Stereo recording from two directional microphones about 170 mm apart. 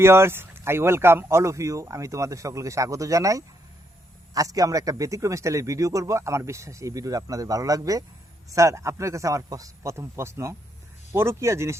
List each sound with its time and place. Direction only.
0.0 s speech: 15° right (ahead or behind)